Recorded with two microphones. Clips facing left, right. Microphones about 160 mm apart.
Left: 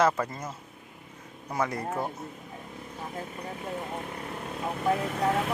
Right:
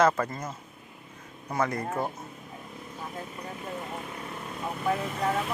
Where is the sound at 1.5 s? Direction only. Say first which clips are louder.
Right 1 dB; 10° left (ahead or behind).